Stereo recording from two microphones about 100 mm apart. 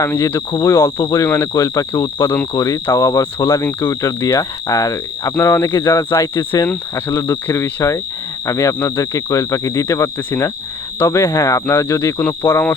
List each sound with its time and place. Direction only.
0.0 s speech: 30° left (ahead or behind)
3.6 s speech: 25° left (ahead or behind); by 6.1 s 45° left (ahead or behind)
6.9 s speech: 30° left (ahead or behind)